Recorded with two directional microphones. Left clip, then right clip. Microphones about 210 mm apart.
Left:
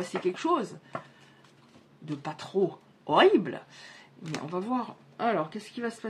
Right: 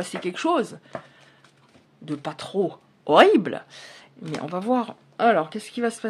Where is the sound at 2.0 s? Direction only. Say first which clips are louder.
Right 6 dB; 45° right (ahead or behind).